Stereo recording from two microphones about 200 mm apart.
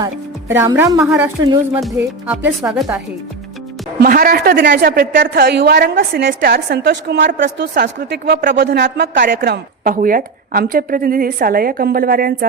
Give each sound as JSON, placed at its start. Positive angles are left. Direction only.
{"t": 0.0, "sound": "speech", "side_deg": -15}
{"t": 4.0, "sound": "a woman's voice", "side_deg": -45}